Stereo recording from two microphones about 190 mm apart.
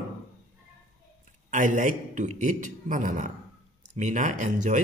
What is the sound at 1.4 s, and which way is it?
A man's voice, 40° right (ahead or behind).